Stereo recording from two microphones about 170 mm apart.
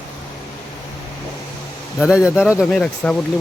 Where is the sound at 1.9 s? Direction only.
5° right (ahead or behind).